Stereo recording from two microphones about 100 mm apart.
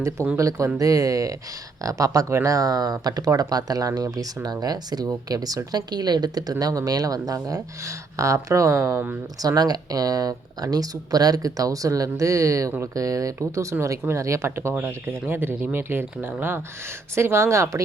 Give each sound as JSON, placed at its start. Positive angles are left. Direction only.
{"t": 0.3, "sound": "speech", "side_deg": -35}